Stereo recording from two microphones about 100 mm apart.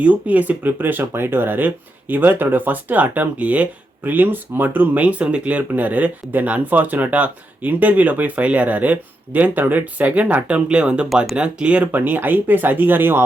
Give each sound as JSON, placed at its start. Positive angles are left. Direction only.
{"t": 0.0, "sound": "speech", "side_deg": -15}